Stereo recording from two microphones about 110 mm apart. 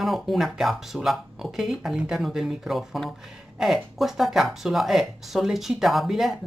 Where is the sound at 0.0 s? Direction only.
Centre (ahead or behind).